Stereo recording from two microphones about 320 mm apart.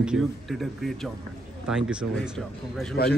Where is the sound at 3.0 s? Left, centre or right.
Left.